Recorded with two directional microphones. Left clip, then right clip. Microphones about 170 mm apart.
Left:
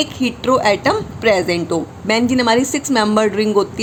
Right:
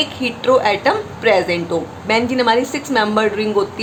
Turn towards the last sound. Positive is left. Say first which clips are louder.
# left 1 dB
turn(degrees=40)  # may be behind; listen again after turning